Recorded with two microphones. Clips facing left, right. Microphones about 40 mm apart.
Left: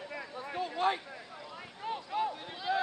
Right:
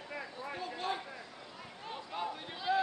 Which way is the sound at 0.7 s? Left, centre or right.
Left.